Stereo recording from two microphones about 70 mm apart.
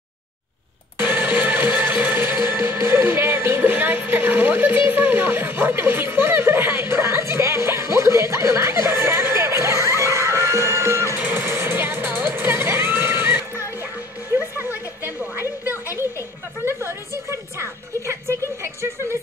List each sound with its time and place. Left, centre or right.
1.0 s music: right
2.6 s music: right
11.2 s music: right
16.0 s music: right
18.6 s a sound: right